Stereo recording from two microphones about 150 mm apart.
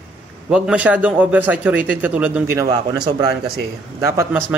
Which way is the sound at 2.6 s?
30° right (ahead or behind).